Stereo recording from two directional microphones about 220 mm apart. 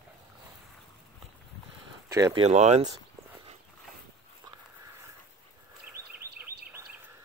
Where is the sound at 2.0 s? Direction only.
15° right (ahead or behind).